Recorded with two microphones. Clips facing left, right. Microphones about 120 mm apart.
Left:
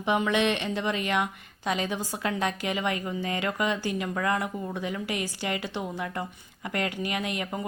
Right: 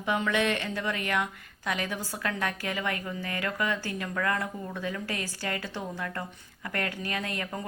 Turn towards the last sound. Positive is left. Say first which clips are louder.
# left 3 dB
turn(degrees=20)  # may be behind; listen again after turning